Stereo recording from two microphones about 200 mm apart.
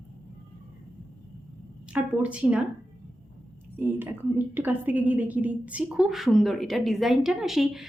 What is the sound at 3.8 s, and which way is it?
A woman's voice, 10° right (ahead or behind).